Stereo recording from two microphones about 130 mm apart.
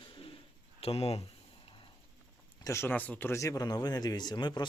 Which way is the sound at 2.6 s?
20° left (ahead or behind).